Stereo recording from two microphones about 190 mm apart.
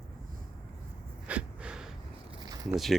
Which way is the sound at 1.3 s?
5° right (ahead or behind).